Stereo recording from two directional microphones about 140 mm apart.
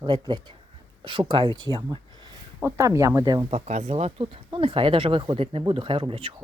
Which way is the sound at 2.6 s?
20° right (ahead or behind).